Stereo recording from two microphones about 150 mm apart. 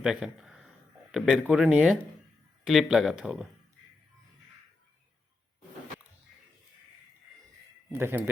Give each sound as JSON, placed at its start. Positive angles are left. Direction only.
{"t": 0.0, "sound": "a sound", "side_deg": -5}
{"t": 1.1, "sound": "speech", "side_deg": 0}
{"t": 7.9, "sound": "speech", "side_deg": -15}